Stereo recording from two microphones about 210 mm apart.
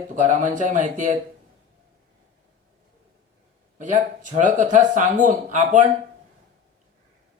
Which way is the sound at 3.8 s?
35° right (ahead or behind).